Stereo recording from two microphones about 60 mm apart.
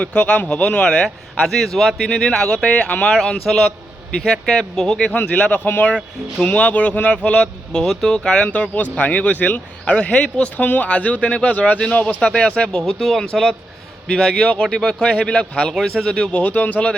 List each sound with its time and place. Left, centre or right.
0.0 s speech: left
3.3 s speech: centre; by 5.5 s left
5.6 s speech: left
12.8 s speech: centre; by 17.0 s left